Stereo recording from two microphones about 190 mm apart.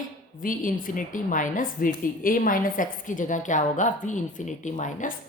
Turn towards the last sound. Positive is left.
turn(degrees=40)  # may be behind; listen again after turning